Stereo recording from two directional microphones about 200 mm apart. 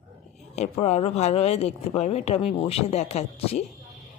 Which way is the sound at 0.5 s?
35° left (ahead or behind).